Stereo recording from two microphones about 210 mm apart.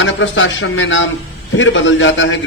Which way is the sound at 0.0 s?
65° left (ahead or behind).